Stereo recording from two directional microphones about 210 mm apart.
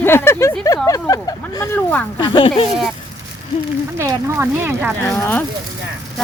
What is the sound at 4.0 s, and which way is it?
Speech, 10° right (ahead or behind).